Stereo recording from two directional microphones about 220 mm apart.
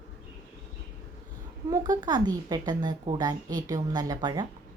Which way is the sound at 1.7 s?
15° right (ahead or behind).